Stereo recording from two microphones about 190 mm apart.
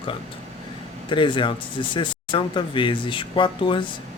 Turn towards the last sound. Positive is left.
turn(degrees=25)  # may be behind; listen again after turning